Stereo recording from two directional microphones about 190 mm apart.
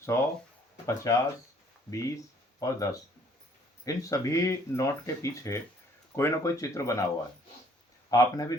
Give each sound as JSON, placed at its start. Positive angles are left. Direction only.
{"t": 0.0, "sound": "speech", "side_deg": 15}
{"t": 8.1, "sound": "speech", "side_deg": 20}